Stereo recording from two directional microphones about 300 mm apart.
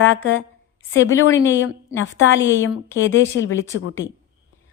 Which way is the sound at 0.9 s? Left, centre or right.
Left.